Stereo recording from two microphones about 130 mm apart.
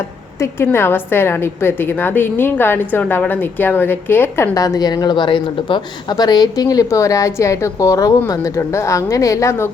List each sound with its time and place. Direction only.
0.3 s a woman's voice: 20° left (ahead or behind)